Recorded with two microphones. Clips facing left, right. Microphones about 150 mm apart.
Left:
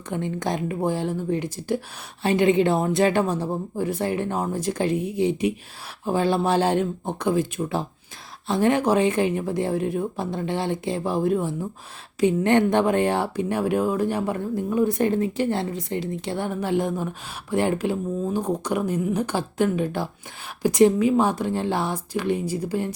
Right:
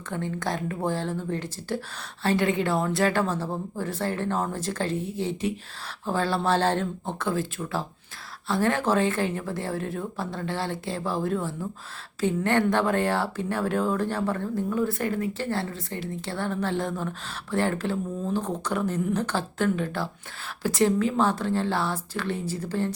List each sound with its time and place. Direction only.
0.1 s speech: 15° left (ahead or behind)